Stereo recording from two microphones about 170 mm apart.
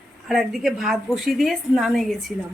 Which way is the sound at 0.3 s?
Centre (ahead or behind).